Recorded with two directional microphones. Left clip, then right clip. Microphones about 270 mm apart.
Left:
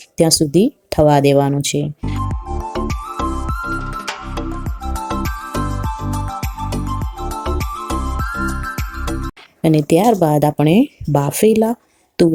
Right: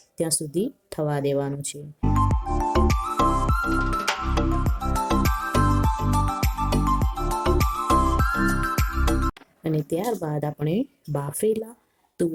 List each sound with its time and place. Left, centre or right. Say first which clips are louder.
0.2 s speech: left 13 dB; centre
2.0 s music: right 1 dB; centre
9.6 s speech: left 13 dB; left